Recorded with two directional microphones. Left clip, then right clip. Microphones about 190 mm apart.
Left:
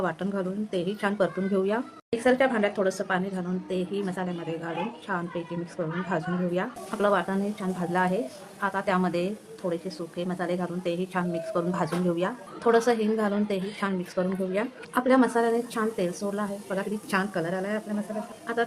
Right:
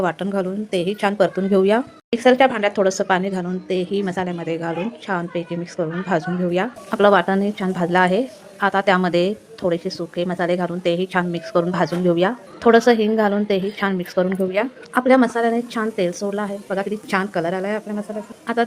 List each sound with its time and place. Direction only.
0.0 s a woman's voice: 25° right (ahead or behind)